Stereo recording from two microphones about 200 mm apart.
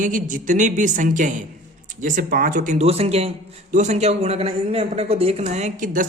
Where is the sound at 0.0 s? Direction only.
40° right (ahead or behind).